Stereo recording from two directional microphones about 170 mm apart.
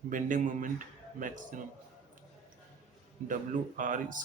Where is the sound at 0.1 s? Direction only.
50° right (ahead or behind).